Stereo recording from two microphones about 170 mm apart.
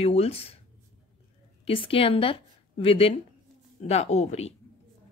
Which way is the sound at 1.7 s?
30° left (ahead or behind).